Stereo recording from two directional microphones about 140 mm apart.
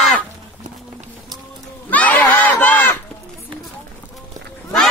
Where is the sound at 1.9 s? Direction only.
10° left (ahead or behind).